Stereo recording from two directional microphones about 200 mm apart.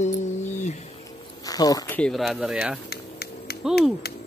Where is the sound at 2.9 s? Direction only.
50° left (ahead or behind).